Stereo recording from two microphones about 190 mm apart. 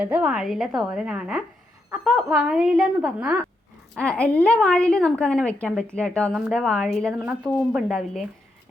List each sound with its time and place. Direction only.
0.0 s a woman's voice: 5° right (ahead or behind)